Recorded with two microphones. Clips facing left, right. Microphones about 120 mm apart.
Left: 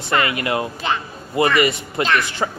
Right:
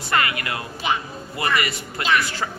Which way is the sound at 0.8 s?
10° right (ahead or behind).